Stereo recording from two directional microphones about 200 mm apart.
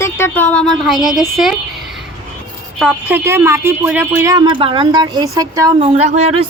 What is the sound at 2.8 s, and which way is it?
Speech, 5° right (ahead or behind).